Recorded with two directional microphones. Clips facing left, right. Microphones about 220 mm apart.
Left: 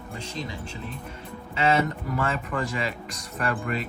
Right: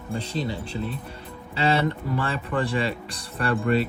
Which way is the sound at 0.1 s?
35° right (ahead or behind).